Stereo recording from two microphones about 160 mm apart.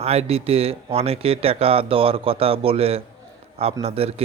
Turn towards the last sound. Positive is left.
turn(degrees=-40)  # may be behind; listen again after turning